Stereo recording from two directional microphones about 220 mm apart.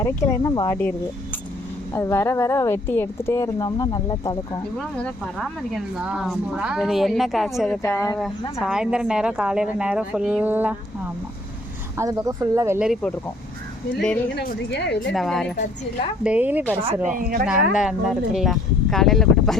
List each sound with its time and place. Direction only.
0.0 s a woman's voice: 15° left (ahead or behind)
4.8 s speech: centre (ahead or behind)
7.8 s a woman's voice: 10° left (ahead or behind)
8.6 s speech: 5° right (ahead or behind)
11.9 s speech: 15° right (ahead or behind)
12.9 s speech: 5° left (ahead or behind)
14.3 s a woman's voice: 50° left (ahead or behind)
15.1 s speech: centre (ahead or behind)
17.2 s speech: 40° right (ahead or behind)
17.4 s speech: 5° right (ahead or behind)